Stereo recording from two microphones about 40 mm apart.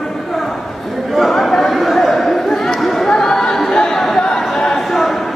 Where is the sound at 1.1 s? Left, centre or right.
Centre.